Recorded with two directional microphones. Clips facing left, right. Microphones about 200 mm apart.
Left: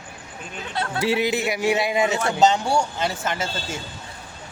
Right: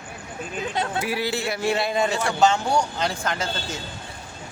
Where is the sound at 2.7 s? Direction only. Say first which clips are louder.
Left 1 dB; 5° left (ahead or behind).